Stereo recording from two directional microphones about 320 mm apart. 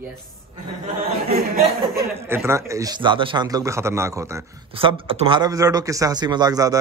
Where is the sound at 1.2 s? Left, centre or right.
Right.